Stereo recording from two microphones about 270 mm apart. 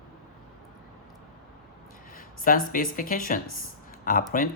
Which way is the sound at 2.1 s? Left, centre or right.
Left.